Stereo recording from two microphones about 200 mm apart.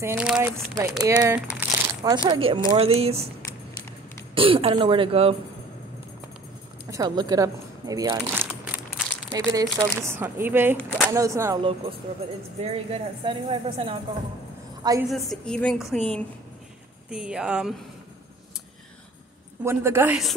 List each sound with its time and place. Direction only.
0.0 s speech: 10° right (ahead or behind)
1.0 s a woman's voice: 20° right (ahead or behind)
4.4 s a woman's voice: 25° right (ahead or behind)
6.9 s speech: 20° right (ahead or behind)
8.6 s crumpling: 5° right (ahead or behind)
9.3 s speech: 15° right (ahead or behind)
10.8 s speech: 5° left (ahead or behind)
11.1 s speech: 15° right (ahead or behind)
12.1 s a woman's voice: 30° right (ahead or behind)
15.0 s speech: centre (ahead or behind)
19.6 s speech: 15° right (ahead or behind)